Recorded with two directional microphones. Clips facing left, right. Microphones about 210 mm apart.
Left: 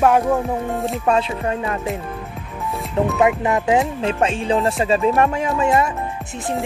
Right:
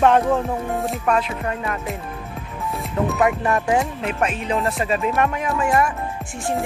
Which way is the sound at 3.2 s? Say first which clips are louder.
Left 2 dB; 20° left (ahead or behind).